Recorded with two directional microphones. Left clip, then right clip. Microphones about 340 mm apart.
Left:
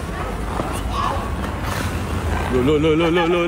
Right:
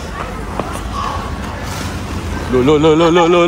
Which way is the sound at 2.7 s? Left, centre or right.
Centre.